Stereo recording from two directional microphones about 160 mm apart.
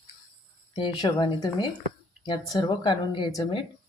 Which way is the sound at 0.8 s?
30° left (ahead or behind).